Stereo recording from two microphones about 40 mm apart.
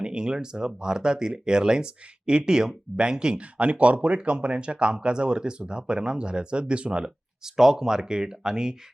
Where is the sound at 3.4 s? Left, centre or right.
Right.